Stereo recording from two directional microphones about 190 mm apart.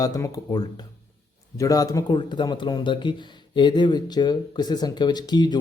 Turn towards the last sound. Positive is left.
turn(degrees=20)  # may be behind; listen again after turning